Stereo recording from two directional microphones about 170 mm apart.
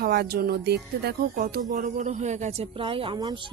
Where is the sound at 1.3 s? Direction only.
50° right (ahead or behind); by 3.5 s 25° right (ahead or behind).